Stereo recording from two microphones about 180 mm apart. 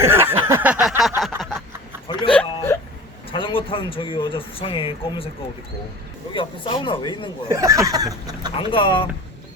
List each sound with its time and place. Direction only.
0.0 s a sound: 15° right (ahead or behind); by 1.6 s centre (ahead or behind)
2.0 s hiccup: 25° left (ahead or behind)
3.3 s speech: 30° left (ahead or behind)
6.3 s speech: 25° left (ahead or behind)
7.4 s speech: 15° right (ahead or behind)
8.7 s speech: 30° left (ahead or behind)